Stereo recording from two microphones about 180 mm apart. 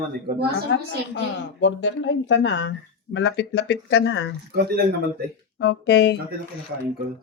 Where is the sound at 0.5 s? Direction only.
85° left.